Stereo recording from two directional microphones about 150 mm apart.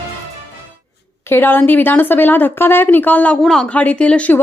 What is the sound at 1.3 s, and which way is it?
A woman's voice, 15° left (ahead or behind).